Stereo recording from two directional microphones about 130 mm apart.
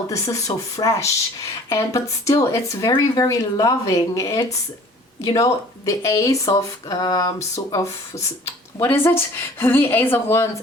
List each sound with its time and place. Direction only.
0.1 s speech: 25° left (ahead or behind)
9.0 s speech: 20° left (ahead or behind)